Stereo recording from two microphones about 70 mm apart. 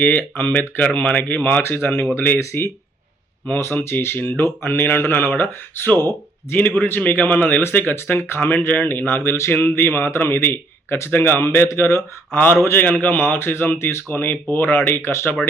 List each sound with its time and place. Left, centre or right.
0.0 s speech: left
2.4 s speech: left
3.8 s speech: left